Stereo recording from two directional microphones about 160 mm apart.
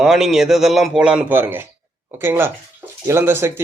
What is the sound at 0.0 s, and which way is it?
A man's voice, 5° right (ahead or behind).